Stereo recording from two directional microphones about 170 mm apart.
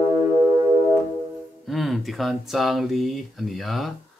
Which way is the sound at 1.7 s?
Centre (ahead or behind).